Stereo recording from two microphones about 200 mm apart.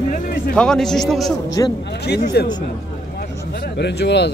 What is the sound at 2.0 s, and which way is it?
Speech, 55° left (ahead or behind).